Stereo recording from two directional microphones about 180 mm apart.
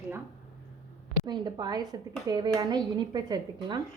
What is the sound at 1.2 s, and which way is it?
Speech, 25° right (ahead or behind).